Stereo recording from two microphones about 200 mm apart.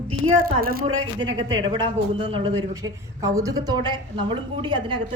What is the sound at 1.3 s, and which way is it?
Speech, 25° right (ahead or behind).